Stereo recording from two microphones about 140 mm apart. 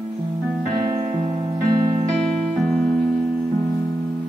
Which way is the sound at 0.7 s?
35° right (ahead or behind).